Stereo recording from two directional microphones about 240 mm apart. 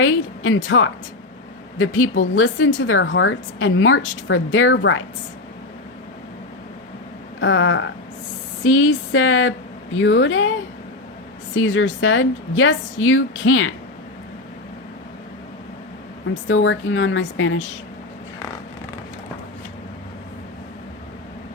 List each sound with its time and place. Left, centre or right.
0.0 s a woman's voice: left
7.3 s a woman's voice: left
11.5 s a woman's voice: left
16.5 s a woman's voice: left